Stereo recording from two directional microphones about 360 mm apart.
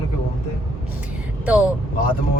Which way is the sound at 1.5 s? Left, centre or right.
Centre.